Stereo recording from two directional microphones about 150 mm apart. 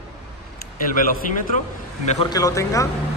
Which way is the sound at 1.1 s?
60° left (ahead or behind).